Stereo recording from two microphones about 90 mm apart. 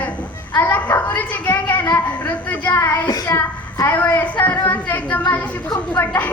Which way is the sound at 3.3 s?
30° left (ahead or behind).